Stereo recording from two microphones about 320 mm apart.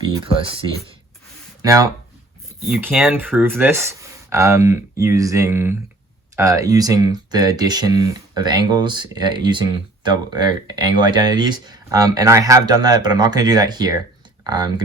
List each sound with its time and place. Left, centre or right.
0.3 s speech: centre
1.6 s speech: centre